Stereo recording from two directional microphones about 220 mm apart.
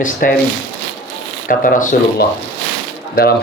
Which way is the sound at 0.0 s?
40° left (ahead or behind).